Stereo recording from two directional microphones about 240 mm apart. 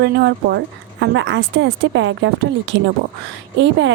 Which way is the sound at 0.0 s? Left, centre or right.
Right.